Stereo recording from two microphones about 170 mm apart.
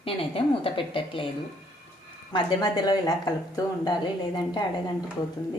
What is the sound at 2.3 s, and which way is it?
A woman's voice, 25° left (ahead or behind).